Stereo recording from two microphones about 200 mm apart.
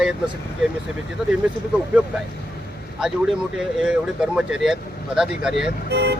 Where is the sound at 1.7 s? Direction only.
5° right (ahead or behind).